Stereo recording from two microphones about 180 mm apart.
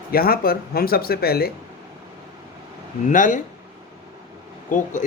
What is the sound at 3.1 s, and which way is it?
Speech, 45° left (ahead or behind).